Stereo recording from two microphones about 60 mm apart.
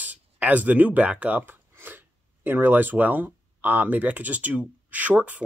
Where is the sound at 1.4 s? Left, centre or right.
Right.